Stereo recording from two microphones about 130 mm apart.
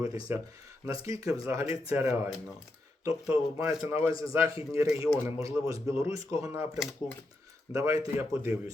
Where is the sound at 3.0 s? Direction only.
25° right (ahead or behind).